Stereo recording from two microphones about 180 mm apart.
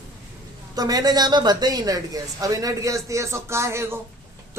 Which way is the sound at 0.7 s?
20° right (ahead or behind).